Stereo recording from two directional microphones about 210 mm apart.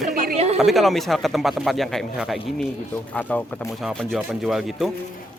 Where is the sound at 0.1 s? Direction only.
45° right (ahead or behind).